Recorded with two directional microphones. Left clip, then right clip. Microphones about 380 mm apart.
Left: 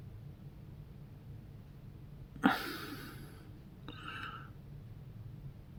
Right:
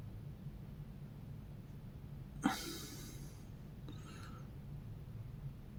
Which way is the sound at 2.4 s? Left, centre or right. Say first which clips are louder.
Left 7 dB; left.